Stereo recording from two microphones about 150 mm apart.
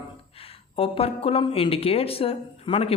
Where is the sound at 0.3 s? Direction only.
40° left (ahead or behind).